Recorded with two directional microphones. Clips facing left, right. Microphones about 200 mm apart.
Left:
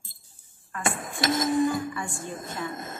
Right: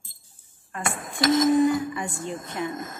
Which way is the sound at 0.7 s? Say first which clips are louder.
Right 1 dB; 25° right (ahead or behind).